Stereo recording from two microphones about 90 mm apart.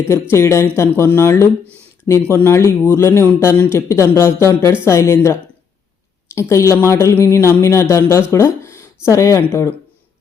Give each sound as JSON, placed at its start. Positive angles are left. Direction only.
{"t": 0.0, "sound": "speech", "side_deg": 30}